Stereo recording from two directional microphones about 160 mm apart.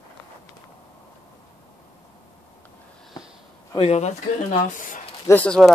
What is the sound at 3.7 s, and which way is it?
Speech, 40° left (ahead or behind).